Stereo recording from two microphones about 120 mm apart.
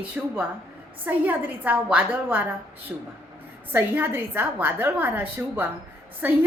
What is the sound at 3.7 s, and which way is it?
A woman's voice, 20° right (ahead or behind).